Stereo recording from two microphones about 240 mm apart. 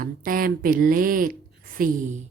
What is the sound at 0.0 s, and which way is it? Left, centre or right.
Speech, right.